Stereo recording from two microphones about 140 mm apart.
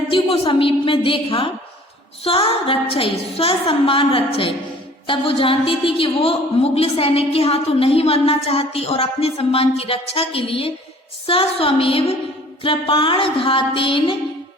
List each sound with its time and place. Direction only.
0.1 s a woman's voice: 40° left (ahead or behind)